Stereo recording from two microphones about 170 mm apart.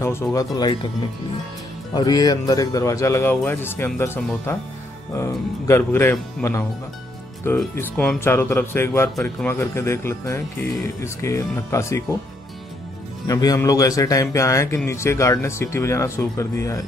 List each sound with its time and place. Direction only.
0.0 s speech: 15° left (ahead or behind)
2.0 s speech: 25° left (ahead or behind)
13.3 s speech: 20° left (ahead or behind)